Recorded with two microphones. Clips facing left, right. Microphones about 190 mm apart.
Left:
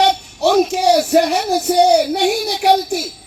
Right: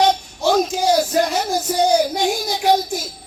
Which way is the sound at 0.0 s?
70° left (ahead or behind).